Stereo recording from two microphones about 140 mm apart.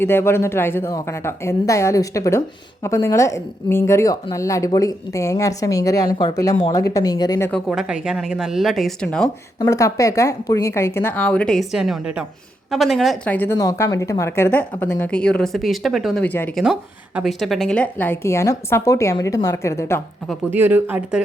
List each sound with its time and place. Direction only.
0.0 s a woman's voice: 15° left (ahead or behind)
7.7 s speech: 5° right (ahead or behind)
9.6 s a woman's voice: 20° left (ahead or behind); by 13.3 s centre (ahead or behind)
13.3 s a woman's voice: 15° left (ahead or behind)
16.2 s a woman's voice: 15° left (ahead or behind)
17.2 s a woman's voice: centre (ahead or behind); by 20.0 s 20° left (ahead or behind)
20.5 s speech: 10° right (ahead or behind)